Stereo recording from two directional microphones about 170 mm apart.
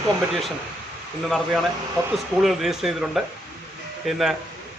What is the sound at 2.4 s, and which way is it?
A man's voice, centre (ahead or behind).